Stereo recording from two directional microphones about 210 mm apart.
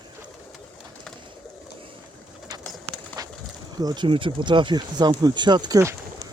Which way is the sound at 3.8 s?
20° right (ahead or behind).